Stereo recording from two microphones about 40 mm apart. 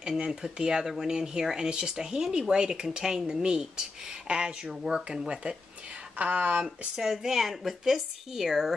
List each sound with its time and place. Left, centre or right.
0.2 s speech: right
6.1 s speech: right
7.0 s speech: centre